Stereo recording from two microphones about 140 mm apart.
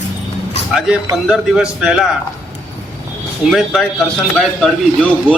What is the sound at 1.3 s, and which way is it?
Speech, 5° right (ahead or behind).